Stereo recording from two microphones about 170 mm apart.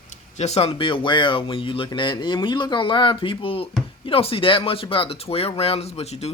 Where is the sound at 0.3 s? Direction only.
40° left (ahead or behind).